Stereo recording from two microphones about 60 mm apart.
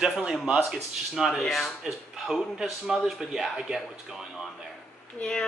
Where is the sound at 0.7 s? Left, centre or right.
Centre.